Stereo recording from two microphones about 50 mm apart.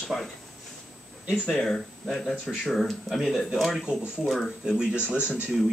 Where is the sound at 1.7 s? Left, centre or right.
Centre.